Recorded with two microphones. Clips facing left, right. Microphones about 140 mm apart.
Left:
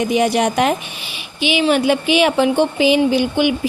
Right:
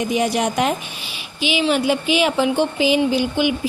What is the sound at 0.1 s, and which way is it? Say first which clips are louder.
A woman's voice: left 3 dB; 70° left (ahead or behind).